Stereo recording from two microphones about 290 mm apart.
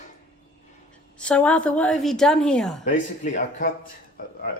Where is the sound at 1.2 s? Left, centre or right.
Centre.